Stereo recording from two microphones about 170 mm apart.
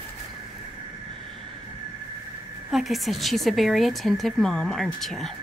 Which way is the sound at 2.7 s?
Centre (ahead or behind).